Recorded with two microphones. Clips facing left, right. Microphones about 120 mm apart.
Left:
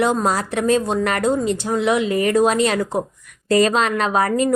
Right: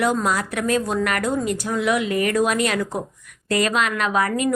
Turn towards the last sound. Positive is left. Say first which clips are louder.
# left 3 dB
turn(degrees=35)  # may be behind; listen again after turning